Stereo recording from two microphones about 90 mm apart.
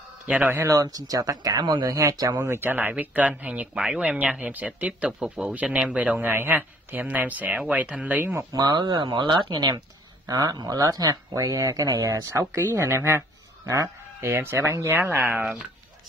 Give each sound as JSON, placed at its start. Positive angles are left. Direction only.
{"t": 0.3, "sound": "speech", "side_deg": -15}
{"t": 0.7, "sound": "speech", "side_deg": -40}
{"t": 8.5, "sound": "speech", "side_deg": -50}
{"t": 10.2, "sound": "speech", "side_deg": -45}